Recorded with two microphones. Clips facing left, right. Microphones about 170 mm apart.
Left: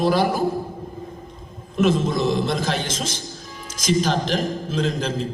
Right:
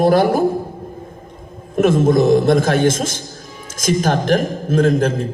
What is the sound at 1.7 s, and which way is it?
A man's voice, 50° right (ahead or behind).